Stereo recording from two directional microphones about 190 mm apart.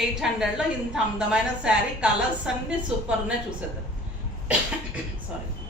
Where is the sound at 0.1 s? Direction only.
5° right (ahead or behind).